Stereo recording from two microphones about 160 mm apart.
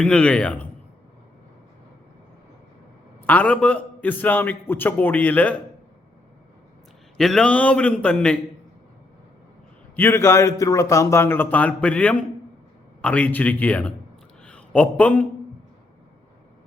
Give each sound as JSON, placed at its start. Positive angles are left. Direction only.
{"t": 0.0, "sound": "a man's voice", "side_deg": 5}
{"t": 3.2, "sound": "a man's voice", "side_deg": 10}
{"t": 7.2, "sound": "a man's voice", "side_deg": 0}
{"t": 9.9, "sound": "a man's voice", "side_deg": 15}